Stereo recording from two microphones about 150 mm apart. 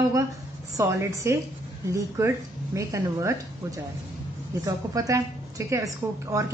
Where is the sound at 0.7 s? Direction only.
20° right (ahead or behind).